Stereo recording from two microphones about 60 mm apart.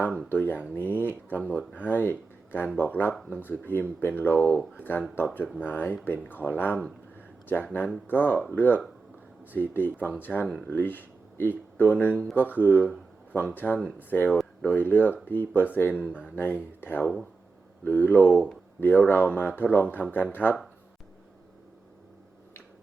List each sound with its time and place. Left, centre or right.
0.3 s speech: left
7.2 s a sound: left
8.0 s speech: left
16.0 s speech: centre
16.3 s speech: left
17.8 s speech: left